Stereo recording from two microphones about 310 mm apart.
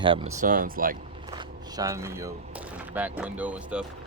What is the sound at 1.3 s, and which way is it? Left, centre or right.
Speech, centre.